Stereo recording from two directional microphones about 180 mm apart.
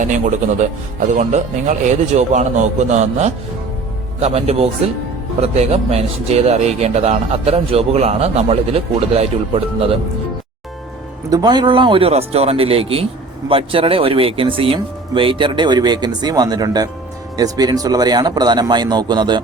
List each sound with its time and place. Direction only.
0.0 s speech: 45° right (ahead or behind)
11.3 s speech: 20° right (ahead or behind)